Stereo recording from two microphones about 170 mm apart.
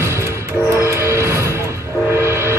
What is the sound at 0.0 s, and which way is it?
Music, 15° right (ahead or behind).